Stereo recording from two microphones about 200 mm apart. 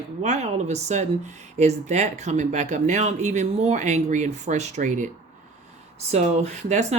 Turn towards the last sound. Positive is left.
turn(degrees=-35)  # may be behind; listen again after turning